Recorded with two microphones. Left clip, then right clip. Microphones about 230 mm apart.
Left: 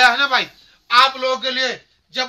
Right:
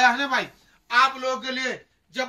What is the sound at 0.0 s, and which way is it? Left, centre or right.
A man's voice, centre.